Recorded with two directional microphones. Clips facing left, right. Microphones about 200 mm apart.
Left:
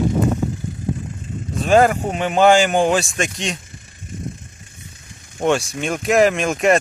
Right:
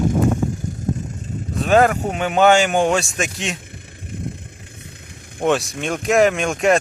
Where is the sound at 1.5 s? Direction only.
Centre (ahead or behind).